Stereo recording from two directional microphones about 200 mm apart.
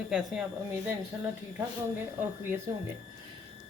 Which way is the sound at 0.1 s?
5° right (ahead or behind).